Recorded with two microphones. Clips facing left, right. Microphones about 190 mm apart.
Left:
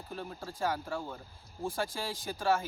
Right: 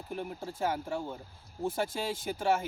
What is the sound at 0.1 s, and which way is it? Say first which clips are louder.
Speech: right 4 dB; 15° right (ahead or behind).